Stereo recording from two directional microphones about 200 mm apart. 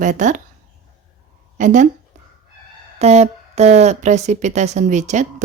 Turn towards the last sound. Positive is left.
turn(degrees=-35)  # may be behind; listen again after turning